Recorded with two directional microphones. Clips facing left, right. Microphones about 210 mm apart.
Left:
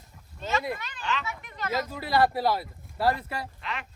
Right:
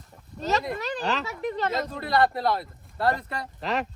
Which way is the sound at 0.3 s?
40° right (ahead or behind).